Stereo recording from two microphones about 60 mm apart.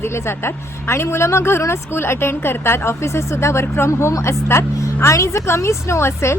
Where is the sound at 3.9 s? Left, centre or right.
Left.